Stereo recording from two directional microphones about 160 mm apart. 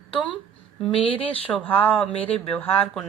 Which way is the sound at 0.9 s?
35° left (ahead or behind).